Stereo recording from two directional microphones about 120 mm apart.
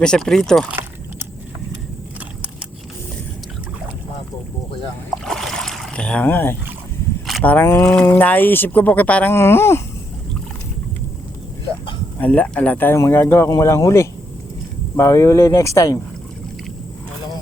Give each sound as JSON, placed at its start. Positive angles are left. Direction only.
{"t": 0.0, "sound": "speech", "side_deg": 5}
{"t": 0.7, "sound": "a sound", "side_deg": -20}
{"t": 5.2, "sound": "boat", "side_deg": 0}
{"t": 7.4, "sound": "speech", "side_deg": 15}
{"t": 12.2, "sound": "speech", "side_deg": 15}